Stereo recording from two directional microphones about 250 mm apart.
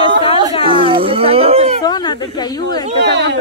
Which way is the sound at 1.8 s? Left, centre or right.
Centre.